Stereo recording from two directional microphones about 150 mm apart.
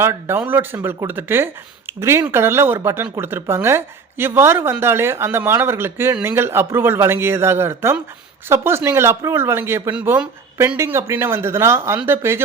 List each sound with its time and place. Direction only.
0.0 s speech: 15° right (ahead or behind)